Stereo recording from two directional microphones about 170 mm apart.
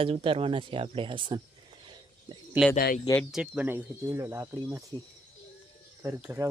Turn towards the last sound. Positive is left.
turn(degrees=-15)  # may be behind; listen again after turning